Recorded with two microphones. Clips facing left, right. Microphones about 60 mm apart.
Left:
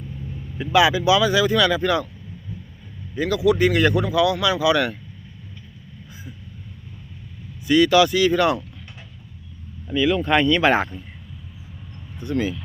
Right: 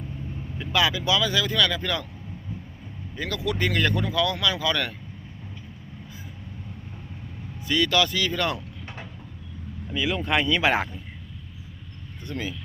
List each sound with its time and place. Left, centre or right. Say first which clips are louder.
0.6 s speech: left 7 dB; centre
3.2 s speech: left 9 dB; centre
7.7 s speech: left 7 dB; centre
9.9 s speech: left 6 dB; centre
12.2 s speech: left 9 dB; centre